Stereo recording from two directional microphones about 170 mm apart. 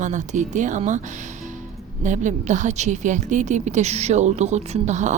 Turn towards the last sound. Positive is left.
turn(degrees=-45)  # may be behind; listen again after turning